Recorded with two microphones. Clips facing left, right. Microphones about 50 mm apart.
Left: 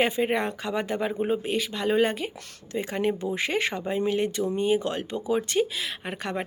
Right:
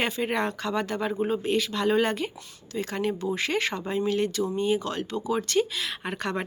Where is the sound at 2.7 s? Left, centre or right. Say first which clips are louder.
Left 2 dB; left.